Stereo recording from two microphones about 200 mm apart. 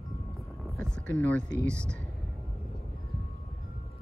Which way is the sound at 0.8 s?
5° left (ahead or behind).